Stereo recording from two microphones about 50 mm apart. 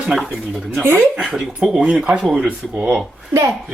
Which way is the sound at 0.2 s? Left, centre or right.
Centre.